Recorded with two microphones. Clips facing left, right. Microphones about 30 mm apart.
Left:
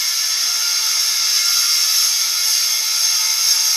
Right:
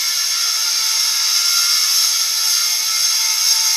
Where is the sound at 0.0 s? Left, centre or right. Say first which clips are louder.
Right 1 dB; centre.